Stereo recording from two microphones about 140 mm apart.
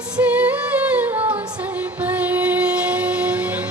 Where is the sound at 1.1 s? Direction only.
40° right (ahead or behind).